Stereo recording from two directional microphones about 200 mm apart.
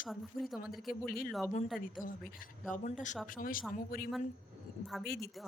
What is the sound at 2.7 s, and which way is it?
A woman's voice, 40° left (ahead or behind).